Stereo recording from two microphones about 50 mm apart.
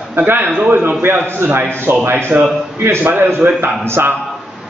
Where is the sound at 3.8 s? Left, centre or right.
Right.